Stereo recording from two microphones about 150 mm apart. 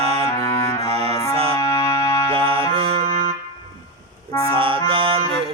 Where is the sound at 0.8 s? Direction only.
40° right (ahead or behind).